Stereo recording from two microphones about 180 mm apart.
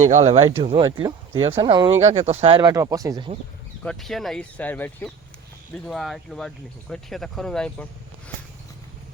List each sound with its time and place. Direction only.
0.1 s speech: 40° right (ahead or behind)
2.0 s speech: 40° right (ahead or behind)
2.6 s speech: 20° right (ahead or behind)
3.8 s speech: centre (ahead or behind)